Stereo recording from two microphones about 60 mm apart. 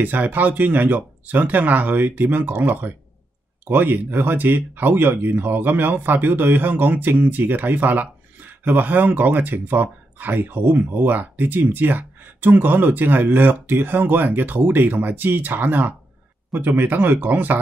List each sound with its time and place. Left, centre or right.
0.0 s speech: right